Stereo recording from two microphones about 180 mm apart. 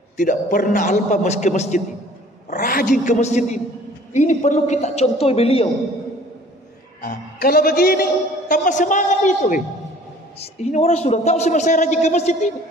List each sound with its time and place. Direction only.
0.2 s a man's voice: 45° left (ahead or behind)
7.0 s a man's voice: 55° left (ahead or behind); by 12.4 s 40° left (ahead or behind)